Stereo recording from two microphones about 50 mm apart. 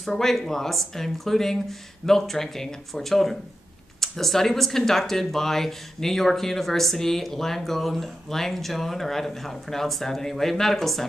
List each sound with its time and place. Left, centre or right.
0.0 s speech: centre